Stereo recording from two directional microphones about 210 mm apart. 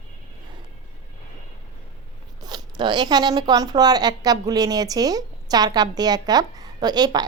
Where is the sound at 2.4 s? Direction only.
20° right (ahead or behind).